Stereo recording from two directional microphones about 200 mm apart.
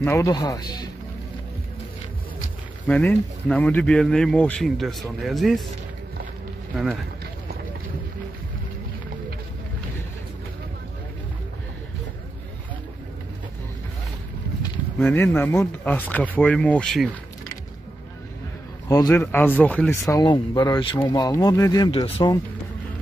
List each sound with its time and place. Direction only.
0.0 s speech: 15° left (ahead or behind)
2.9 s speech: 5° left (ahead or behind)
15.0 s speech: 10° left (ahead or behind)
18.9 s speech: 15° left (ahead or behind)
21.9 s speech: 30° left (ahead or behind)